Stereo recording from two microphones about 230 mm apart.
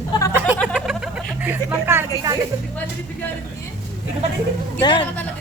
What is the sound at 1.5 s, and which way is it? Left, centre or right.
Speech, centre.